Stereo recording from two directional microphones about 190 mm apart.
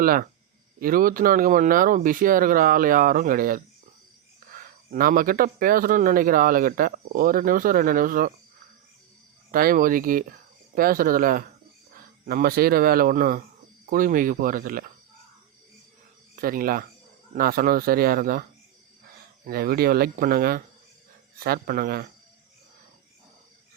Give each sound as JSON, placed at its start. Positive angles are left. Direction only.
{"t": 0.0, "sound": "speech", "side_deg": -50}
{"t": 4.9, "sound": "speech", "side_deg": -50}
{"t": 9.5, "sound": "speech", "side_deg": -50}
{"t": 16.3, "sound": "speech", "side_deg": -50}
{"t": 19.5, "sound": "speech", "side_deg": -50}